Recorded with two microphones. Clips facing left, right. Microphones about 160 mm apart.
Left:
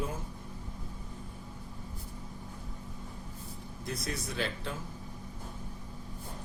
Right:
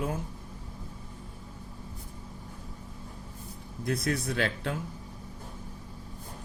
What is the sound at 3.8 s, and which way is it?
Speech, 60° right (ahead or behind).